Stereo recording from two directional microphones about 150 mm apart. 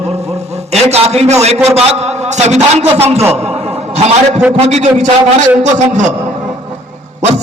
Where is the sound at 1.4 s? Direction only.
45° right (ahead or behind).